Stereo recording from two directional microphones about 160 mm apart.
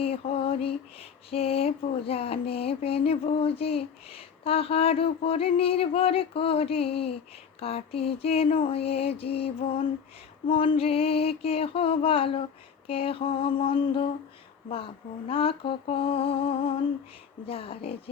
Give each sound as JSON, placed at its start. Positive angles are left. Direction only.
{"t": 0.0, "sound": "mantra", "side_deg": 35}
{"t": 15.3, "sound": "mantra", "side_deg": 35}